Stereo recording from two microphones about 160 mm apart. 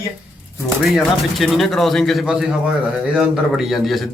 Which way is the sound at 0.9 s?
Centre (ahead or behind).